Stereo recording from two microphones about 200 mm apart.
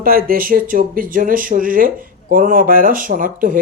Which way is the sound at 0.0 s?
45° right (ahead or behind).